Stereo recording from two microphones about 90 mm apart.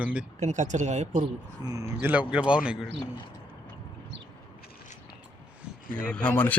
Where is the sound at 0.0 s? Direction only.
15° right (ahead or behind).